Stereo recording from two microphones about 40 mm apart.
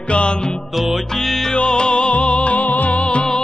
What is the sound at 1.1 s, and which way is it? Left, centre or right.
Music, centre.